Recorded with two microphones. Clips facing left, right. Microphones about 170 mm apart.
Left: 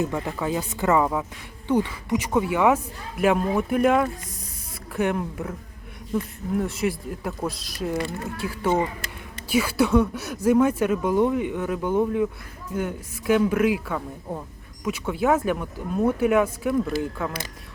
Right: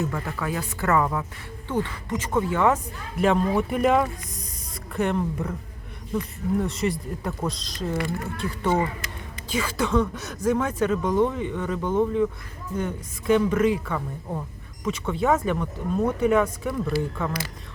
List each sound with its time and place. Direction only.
0.0 s speech: 20° left (ahead or behind)